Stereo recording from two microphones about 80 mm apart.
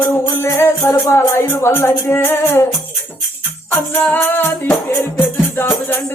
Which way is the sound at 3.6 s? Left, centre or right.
Left.